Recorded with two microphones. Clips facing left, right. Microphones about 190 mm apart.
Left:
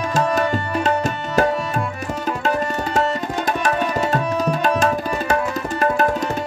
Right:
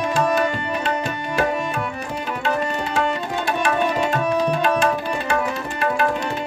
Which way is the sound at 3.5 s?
40° left (ahead or behind).